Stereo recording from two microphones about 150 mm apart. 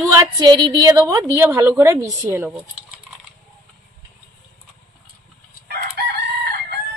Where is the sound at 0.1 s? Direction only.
25° right (ahead or behind).